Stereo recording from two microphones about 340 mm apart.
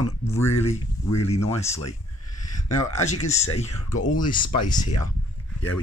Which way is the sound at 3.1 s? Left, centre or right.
Centre.